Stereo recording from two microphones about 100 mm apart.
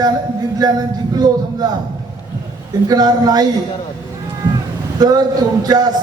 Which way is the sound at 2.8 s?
40° right (ahead or behind).